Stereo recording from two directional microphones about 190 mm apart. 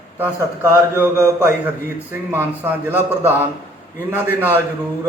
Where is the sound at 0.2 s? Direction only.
10° right (ahead or behind).